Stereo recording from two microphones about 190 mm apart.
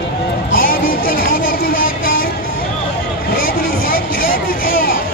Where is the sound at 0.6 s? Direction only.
45° left (ahead or behind).